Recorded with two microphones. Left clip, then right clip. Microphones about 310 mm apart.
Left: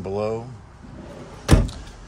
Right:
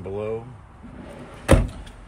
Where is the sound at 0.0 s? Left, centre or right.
Centre.